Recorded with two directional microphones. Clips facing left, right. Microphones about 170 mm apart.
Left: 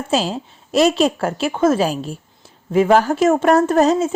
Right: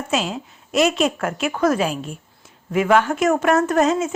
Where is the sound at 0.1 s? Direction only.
30° left (ahead or behind).